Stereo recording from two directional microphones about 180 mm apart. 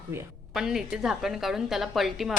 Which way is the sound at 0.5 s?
5° right (ahead or behind).